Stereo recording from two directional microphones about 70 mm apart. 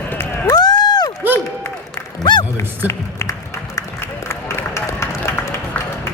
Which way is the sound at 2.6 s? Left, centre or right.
Left.